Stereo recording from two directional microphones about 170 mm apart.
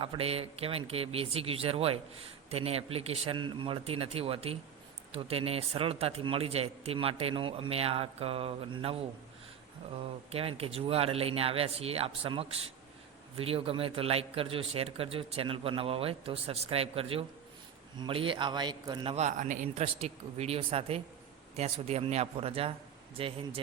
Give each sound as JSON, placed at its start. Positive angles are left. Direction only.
{"t": 0.0, "sound": "a man's voice", "side_deg": -35}
{"t": 10.3, "sound": "a man's voice", "side_deg": -35}
{"t": 19.1, "sound": "a man's voice", "side_deg": -45}